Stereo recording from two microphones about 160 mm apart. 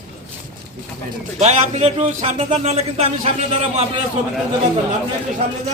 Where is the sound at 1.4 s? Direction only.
45° right (ahead or behind).